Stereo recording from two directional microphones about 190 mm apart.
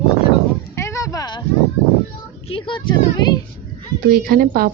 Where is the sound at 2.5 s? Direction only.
25° left (ahead or behind).